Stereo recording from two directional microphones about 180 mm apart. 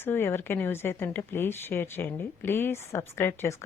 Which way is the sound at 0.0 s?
10° left (ahead or behind).